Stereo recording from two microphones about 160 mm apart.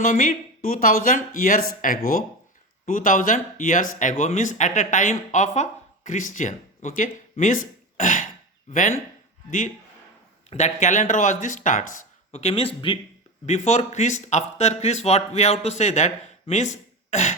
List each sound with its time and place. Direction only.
0.0 s speech: 55° left (ahead or behind)
10.5 s speech: 45° left (ahead or behind)
13.4 s speech: 45° left (ahead or behind)
16.7 s throat clearing: 45° left (ahead or behind)